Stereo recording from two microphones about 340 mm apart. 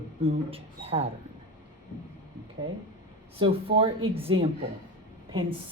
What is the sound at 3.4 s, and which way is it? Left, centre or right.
Speech, centre.